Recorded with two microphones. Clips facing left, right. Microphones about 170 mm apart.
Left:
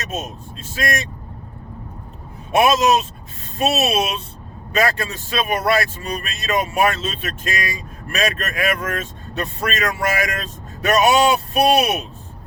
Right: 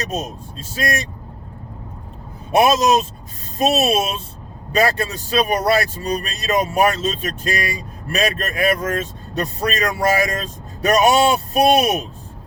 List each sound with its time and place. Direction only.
0.6 s speech: 35° right (ahead or behind)
2.5 s speech: 35° right (ahead or behind)